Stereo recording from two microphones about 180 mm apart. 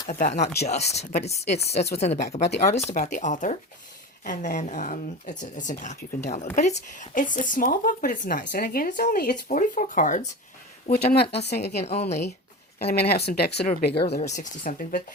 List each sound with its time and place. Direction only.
0.1 s a woman's voice: 45° left (ahead or behind)
11.4 s speech: 65° left (ahead or behind)
11.8 s speech: 35° left (ahead or behind)
12.8 s speech: 60° left (ahead or behind)
14.3 s a woman's voice: 45° left (ahead or behind)